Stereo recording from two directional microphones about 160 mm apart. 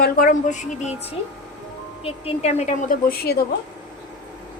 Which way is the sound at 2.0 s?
40° left (ahead or behind).